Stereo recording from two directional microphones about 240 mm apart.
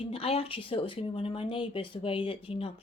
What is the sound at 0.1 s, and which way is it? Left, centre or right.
Speech, left.